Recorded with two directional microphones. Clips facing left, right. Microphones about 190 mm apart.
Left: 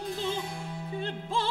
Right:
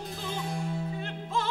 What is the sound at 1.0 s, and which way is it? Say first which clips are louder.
Music: left 1 dB; 30° left (ahead or behind).